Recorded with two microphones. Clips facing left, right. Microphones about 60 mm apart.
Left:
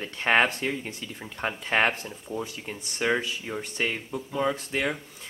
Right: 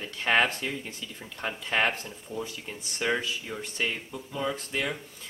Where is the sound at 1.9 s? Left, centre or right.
Centre.